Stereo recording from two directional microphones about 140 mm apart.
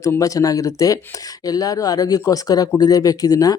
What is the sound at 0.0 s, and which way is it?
Speech, 25° left (ahead or behind).